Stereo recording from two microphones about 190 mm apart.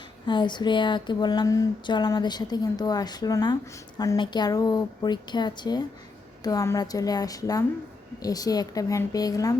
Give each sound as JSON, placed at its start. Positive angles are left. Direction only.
{"t": 0.3, "sound": "speech", "side_deg": 25}